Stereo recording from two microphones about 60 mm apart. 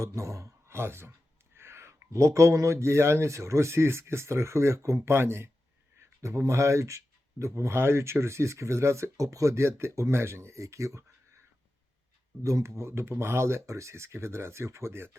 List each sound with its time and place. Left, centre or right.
0.0 s a man's voice: right
0.7 s speech: right
6.0 s speech: right
12.4 s speech: right